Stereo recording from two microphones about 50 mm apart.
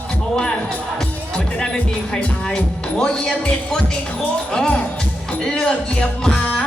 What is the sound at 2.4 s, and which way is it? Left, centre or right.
Speech, centre.